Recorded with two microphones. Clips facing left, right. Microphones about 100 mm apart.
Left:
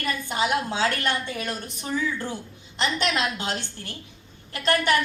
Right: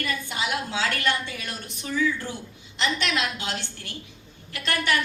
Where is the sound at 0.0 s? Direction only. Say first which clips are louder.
Left 3 dB; 40° left (ahead or behind).